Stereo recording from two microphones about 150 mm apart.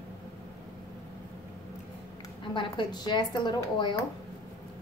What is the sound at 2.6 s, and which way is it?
Speech, 30° left (ahead or behind).